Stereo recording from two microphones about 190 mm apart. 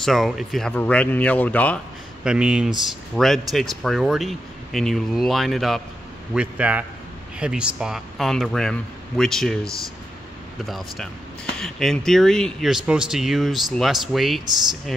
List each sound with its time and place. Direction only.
0.0 s speech: centre (ahead or behind)
2.2 s a man's voice: 5° right (ahead or behind)
10.6 s speech: centre (ahead or behind)